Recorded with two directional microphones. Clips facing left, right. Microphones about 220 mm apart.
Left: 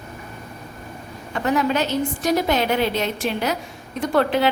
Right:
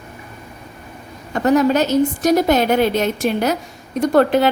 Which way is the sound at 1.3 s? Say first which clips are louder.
Right 6 dB; 40° right (ahead or behind).